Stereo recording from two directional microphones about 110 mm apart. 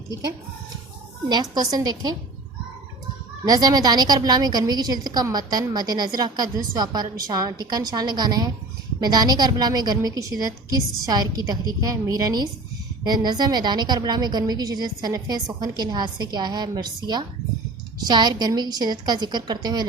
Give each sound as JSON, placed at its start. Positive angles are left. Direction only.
{"t": 1.3, "sound": "a woman's voice", "side_deg": -40}
{"t": 3.4, "sound": "a woman's voice", "side_deg": -35}